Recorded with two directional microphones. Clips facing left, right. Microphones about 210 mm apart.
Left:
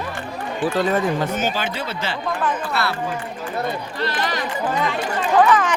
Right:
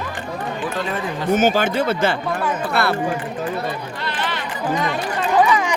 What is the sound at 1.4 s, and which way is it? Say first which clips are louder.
Speech: right 7 dB; 50° right (ahead or behind).